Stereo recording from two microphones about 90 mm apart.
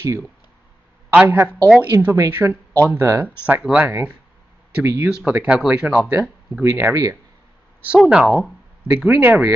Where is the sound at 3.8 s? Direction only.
20° right (ahead or behind).